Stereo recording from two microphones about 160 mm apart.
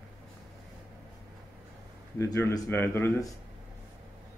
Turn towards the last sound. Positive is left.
turn(degrees=15)  # may be behind; listen again after turning